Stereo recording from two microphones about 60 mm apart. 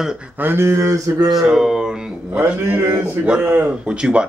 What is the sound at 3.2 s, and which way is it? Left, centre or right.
Speech, right.